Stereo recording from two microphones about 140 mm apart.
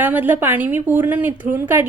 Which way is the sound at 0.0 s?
15° right (ahead or behind).